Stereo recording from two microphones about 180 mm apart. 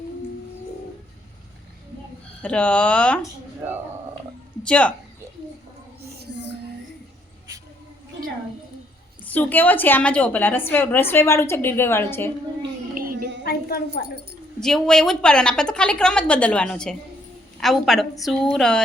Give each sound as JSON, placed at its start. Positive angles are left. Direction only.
{"t": 2.4, "sound": "a woman's voice", "side_deg": 5}
{"t": 4.6, "sound": "a woman's voice", "side_deg": 5}
{"t": 6.0, "sound": "a sound", "side_deg": -65}
{"t": 9.2, "sound": "a woman's voice", "side_deg": 10}
{"t": 12.9, "sound": "a sound", "side_deg": -50}
{"t": 13.4, "sound": "wind chime", "side_deg": 55}
{"t": 14.6, "sound": "a woman's voice", "side_deg": 5}